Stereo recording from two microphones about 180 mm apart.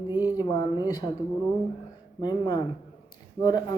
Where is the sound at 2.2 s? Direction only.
25° left (ahead or behind).